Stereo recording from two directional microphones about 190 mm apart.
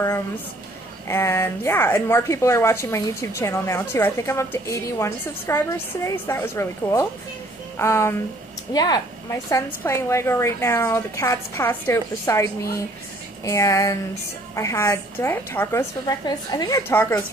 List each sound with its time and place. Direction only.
1.0 s speech: 15° left (ahead or behind)